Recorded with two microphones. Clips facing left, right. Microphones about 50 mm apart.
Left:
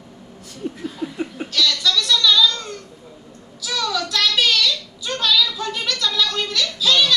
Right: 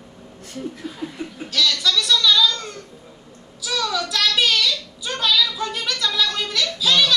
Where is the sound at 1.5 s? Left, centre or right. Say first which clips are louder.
Even; centre.